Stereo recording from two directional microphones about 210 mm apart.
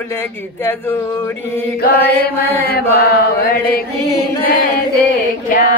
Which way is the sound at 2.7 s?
45° left (ahead or behind).